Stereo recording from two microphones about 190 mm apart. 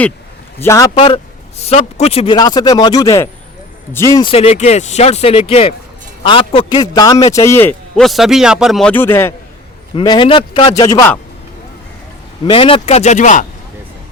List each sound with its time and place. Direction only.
0.6 s a man's voice: 15° left (ahead or behind)
0.9 s a man's voice: 30° left (ahead or behind); by 4.2 s 15° left (ahead or behind)
4.2 s speech: 30° left (ahead or behind); by 9.3 s 10° left (ahead or behind)
9.9 s speech: 25° left (ahead or behind)
12.5 s speech: 30° left (ahead or behind)